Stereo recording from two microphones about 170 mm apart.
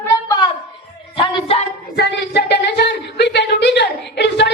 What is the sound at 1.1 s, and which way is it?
Music, 30° left (ahead or behind).